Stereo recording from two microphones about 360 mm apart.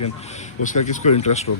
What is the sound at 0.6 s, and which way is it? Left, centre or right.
Speech, left.